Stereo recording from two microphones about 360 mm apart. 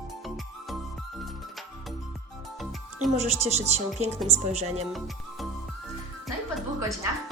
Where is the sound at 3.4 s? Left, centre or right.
Centre.